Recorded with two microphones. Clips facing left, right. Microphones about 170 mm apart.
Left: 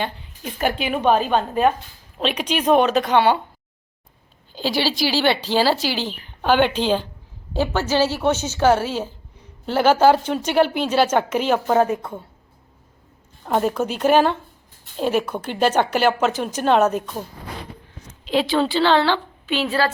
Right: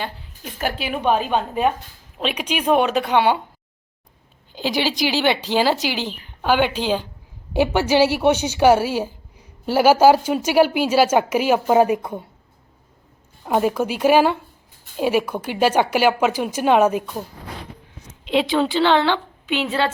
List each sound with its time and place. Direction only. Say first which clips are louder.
0.0 s a woman's voice: left 3 dB; centre (ahead or behind)
4.5 s speech: even; 15° right (ahead or behind)
13.4 s speech: right 1 dB; 10° right (ahead or behind)
18.3 s speech: right 1 dB; 20° right (ahead or behind)